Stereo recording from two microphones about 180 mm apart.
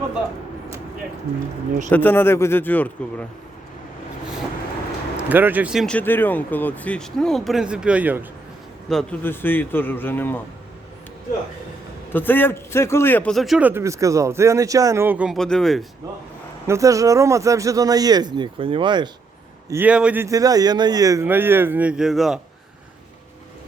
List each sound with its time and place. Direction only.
1.9 s a man's voice: 10° left (ahead or behind)
5.1 s a man's voice: 10° right (ahead or behind)
8.9 s a man's voice: 5° left (ahead or behind)
12.1 s a man's voice: 10° left (ahead or behind)
16.6 s speech: 15° right (ahead or behind)
19.7 s a man's voice: 10° right (ahead or behind)
20.2 s a man's voice: 20° right (ahead or behind); by 22.4 s centre (ahead or behind)